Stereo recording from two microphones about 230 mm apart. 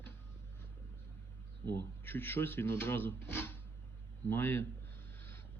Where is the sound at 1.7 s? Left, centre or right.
Centre.